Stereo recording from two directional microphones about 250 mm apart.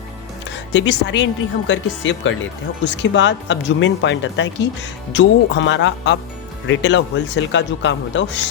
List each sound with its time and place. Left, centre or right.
0.7 s speech: left